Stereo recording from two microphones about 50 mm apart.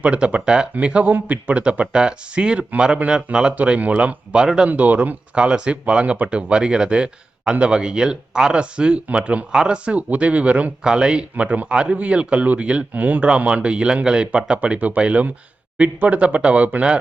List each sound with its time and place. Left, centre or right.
0.0 s speech: right
3.6 s speech: right
4.7 s speech: right
10.8 s speech: centre
12.9 s speech: right
13.2 s speech: right